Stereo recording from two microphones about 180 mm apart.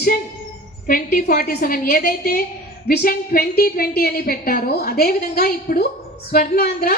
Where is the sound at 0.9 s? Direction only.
50° left (ahead or behind).